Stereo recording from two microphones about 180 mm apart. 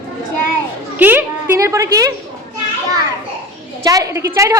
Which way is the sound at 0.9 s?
10° right (ahead or behind).